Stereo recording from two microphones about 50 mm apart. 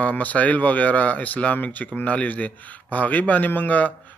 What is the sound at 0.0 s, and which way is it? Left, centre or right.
Speech, left.